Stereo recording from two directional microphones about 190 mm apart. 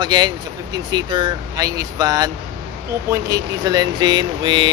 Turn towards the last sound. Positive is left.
turn(degrees=-25)  # may be behind; listen again after turning